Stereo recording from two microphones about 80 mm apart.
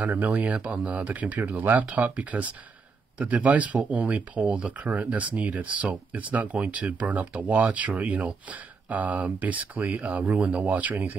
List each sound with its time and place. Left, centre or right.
0.0 s speech: centre